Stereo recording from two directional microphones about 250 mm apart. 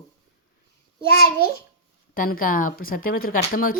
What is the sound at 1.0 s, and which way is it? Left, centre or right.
Speech, left.